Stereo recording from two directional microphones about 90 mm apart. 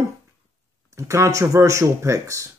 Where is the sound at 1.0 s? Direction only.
35° right (ahead or behind).